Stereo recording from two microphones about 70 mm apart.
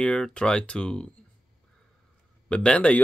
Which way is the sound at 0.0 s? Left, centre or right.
Centre.